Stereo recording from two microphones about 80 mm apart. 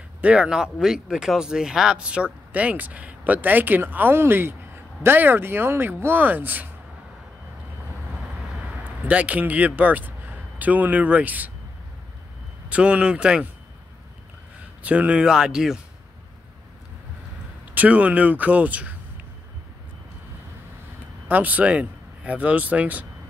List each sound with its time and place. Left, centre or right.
0.2 s speech: centre
8.5 s speech: centre
12.6 s speech: centre
14.8 s speech: centre
17.7 s speech: centre
21.3 s speech: centre